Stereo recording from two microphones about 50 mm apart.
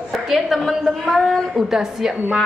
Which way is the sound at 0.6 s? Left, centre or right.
Centre.